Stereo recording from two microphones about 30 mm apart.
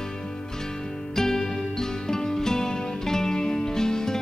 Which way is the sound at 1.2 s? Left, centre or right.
Centre.